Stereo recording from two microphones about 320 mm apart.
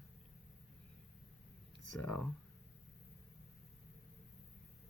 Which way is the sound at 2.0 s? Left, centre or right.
Centre.